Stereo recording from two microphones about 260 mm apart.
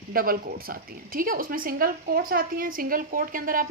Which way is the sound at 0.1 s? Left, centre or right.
Right.